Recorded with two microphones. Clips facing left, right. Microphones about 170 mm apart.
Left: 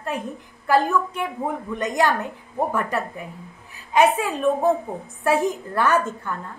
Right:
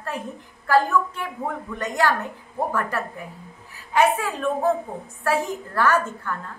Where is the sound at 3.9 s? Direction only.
20° left (ahead or behind).